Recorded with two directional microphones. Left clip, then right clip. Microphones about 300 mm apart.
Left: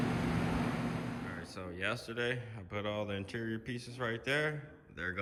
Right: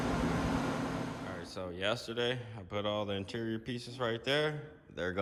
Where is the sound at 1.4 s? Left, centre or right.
Centre.